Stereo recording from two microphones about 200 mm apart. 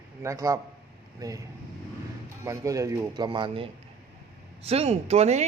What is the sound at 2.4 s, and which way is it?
A man's voice, 15° right (ahead or behind).